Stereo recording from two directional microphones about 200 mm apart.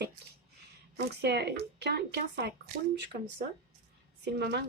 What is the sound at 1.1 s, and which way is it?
Speech, 55° right (ahead or behind).